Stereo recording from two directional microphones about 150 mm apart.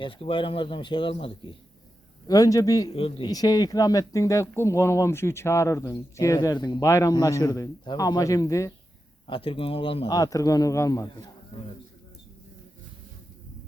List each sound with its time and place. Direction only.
0.0 s speech: 35° left (ahead or behind)
2.9 s speech: 35° left (ahead or behind); by 8.7 s 20° left (ahead or behind)
9.2 s speech: 35° left (ahead or behind)
10.1 s speech: 25° left (ahead or behind)